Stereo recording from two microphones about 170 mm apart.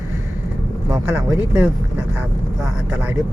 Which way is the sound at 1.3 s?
10° right (ahead or behind).